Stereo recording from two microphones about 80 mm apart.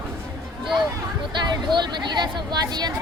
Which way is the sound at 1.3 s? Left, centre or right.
Right.